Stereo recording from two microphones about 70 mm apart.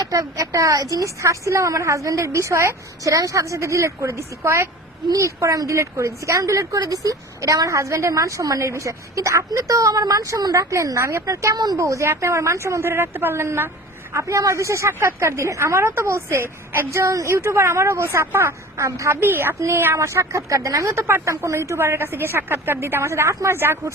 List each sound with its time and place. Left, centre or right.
0.1 s a woman's voice: right
18.9 s speech: right
19.2 s a woman's voice: right
20.1 s a woman's voice: right